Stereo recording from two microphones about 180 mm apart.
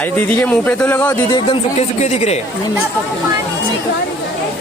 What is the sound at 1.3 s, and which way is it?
Speech, 30° left (ahead or behind).